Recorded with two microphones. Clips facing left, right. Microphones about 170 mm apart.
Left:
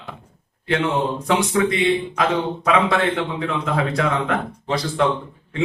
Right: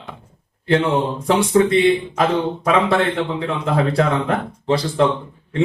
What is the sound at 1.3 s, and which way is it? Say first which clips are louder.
A man's voice: right 5 dB; 30° right (ahead or behind).